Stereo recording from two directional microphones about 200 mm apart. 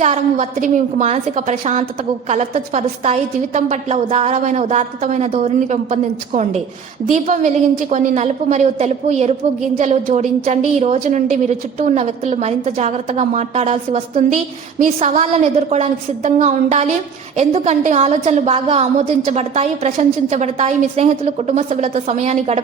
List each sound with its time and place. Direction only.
0.0 s a woman's voice: 35° right (ahead or behind)